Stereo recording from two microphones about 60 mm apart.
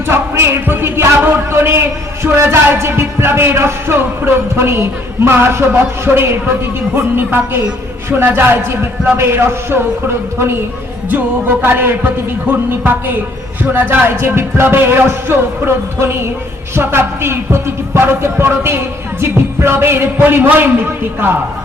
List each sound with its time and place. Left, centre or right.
0.0 s a man's voice: right
2.8 s music: right
6.9 s speech: right